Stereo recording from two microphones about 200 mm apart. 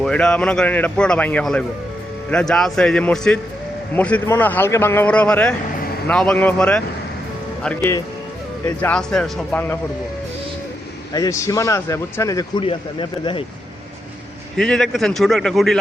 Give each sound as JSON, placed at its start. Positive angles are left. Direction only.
{"t": 0.0, "sound": "a man's voice", "side_deg": 5}
{"t": 11.1, "sound": "a man's voice", "side_deg": 15}
{"t": 14.5, "sound": "a man's voice", "side_deg": 5}